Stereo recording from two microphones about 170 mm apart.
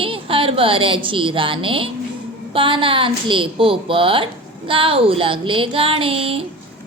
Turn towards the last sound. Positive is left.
turn(degrees=-35)  # may be behind; listen again after turning